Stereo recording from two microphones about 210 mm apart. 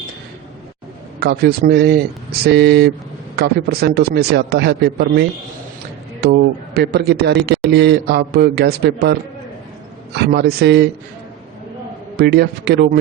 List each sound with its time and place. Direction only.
1.2 s a man's voice: 45° right (ahead or behind)
6.2 s a man's voice: 50° right (ahead or behind)
10.2 s a man's voice: 50° right (ahead or behind)
12.1 s a man's voice: 50° right (ahead or behind)